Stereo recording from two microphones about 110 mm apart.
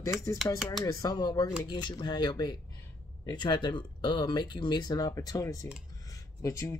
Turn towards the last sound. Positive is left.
turn(degrees=30)  # may be behind; listen again after turning